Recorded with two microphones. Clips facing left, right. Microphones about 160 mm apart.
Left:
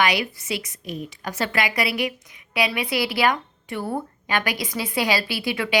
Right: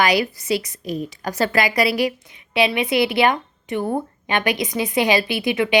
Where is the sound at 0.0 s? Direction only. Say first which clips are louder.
Right 4 dB; 40° right (ahead or behind).